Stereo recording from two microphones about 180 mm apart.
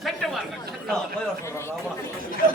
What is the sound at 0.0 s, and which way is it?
Chatter, centre (ahead or behind).